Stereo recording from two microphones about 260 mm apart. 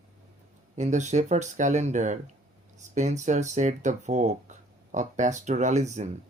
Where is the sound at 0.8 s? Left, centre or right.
Right.